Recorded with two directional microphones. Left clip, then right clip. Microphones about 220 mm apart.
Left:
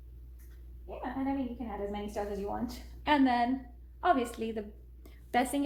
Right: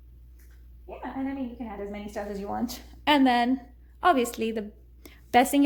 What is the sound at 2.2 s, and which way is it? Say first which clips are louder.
Speech: right 3 dB; 35° right (ahead or behind).